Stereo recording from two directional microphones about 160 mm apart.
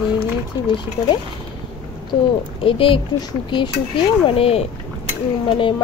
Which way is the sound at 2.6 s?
35° left (ahead or behind).